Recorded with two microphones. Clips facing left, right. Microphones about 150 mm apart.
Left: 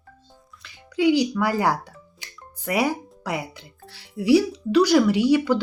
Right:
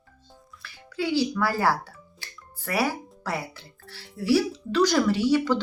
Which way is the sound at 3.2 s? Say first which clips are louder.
Left 3 dB; 15° left (ahead or behind).